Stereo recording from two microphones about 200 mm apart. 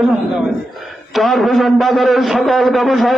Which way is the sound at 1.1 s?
Centre (ahead or behind).